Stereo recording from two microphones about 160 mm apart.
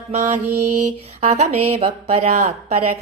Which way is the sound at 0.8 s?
45° right (ahead or behind).